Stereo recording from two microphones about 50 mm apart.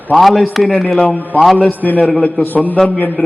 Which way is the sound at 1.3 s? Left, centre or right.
Left.